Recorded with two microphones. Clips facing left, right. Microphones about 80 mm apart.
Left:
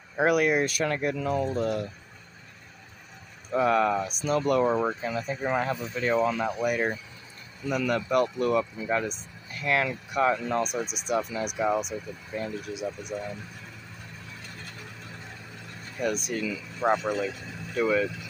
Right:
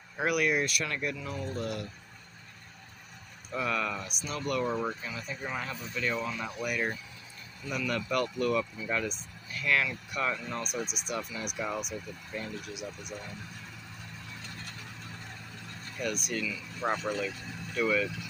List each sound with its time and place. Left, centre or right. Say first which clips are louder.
0.2 s speech: left 5 dB; left
1.2 s speech: left 10 dB; left
1.5 s speech: left 7 dB; left
3.4 s speech: left 9 dB; left
12.3 s speech: left 6 dB; centre
12.7 s speech: left 8 dB; left
16.0 s speech: left 5 dB; left
16.8 s speech: left 6 dB; centre
17.3 s vehicle: left 3 dB; centre